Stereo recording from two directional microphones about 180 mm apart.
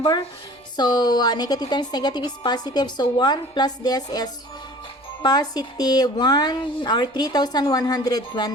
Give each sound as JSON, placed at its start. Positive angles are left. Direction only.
{"t": 0.8, "sound": "a woman's voice", "side_deg": 25}